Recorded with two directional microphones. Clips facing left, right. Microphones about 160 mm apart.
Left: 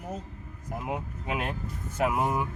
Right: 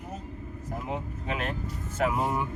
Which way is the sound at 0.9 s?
10° left (ahead or behind).